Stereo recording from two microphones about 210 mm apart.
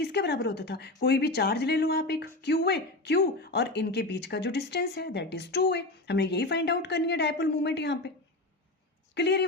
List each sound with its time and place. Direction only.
0.0 s speech: 50° left (ahead or behind)
9.1 s speech: 55° left (ahead or behind)